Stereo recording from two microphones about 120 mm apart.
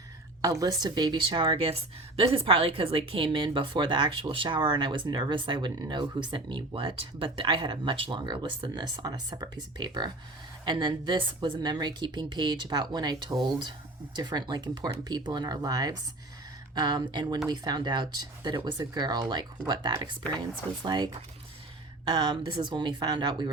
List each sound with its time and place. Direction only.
0.4 s a woman's voice: 30° right (ahead or behind)